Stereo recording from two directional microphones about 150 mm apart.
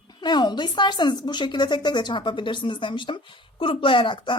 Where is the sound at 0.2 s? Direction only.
30° left (ahead or behind).